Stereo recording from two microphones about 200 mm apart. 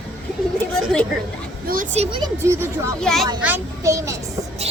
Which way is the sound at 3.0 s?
Centre (ahead or behind).